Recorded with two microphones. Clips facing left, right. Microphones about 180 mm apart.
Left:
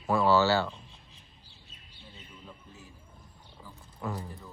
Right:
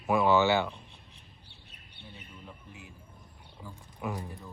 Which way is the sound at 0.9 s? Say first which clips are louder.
Right 1 dB; 65° right (ahead or behind).